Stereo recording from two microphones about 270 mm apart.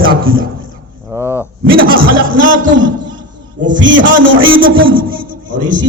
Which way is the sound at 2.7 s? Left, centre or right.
Right.